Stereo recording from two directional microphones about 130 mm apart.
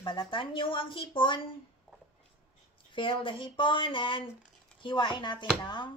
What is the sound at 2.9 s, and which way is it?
Speech, 40° left (ahead or behind).